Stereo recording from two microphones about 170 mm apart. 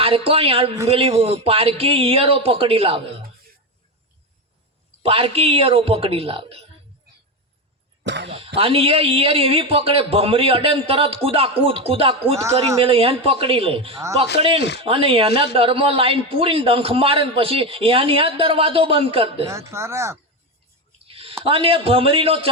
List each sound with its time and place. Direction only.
0.0 s a man's voice: 35° right (ahead or behind)
5.0 s a man's voice: 35° right (ahead or behind)
8.0 s speech: 90° right
8.5 s a man's voice: 35° right (ahead or behind)
14.6 s speech: 80° left
14.8 s a man's voice: 35° right (ahead or behind)
19.5 s speech: 15° right (ahead or behind)
21.1 s a sound: 35° right (ahead or behind)
21.4 s a man's voice: 35° right (ahead or behind)